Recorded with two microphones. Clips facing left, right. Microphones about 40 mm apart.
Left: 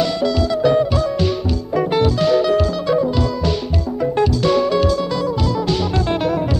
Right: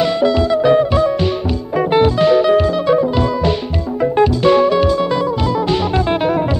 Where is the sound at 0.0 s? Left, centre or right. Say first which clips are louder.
Right 4 dB; right.